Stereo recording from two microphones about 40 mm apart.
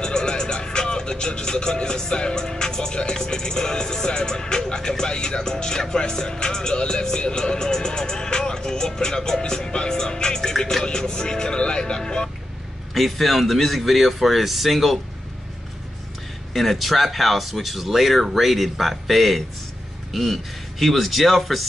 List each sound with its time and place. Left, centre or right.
0.0 s music: centre
12.9 s speech: centre
16.5 s speech: centre